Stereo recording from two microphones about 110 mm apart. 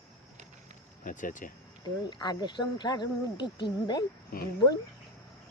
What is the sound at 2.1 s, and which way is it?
Speech, 45° left (ahead or behind).